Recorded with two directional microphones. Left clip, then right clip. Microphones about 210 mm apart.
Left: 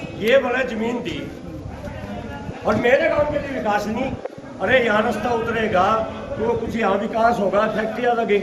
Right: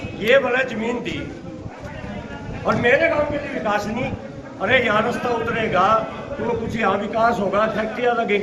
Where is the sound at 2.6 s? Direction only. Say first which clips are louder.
Even; 5° left (ahead or behind).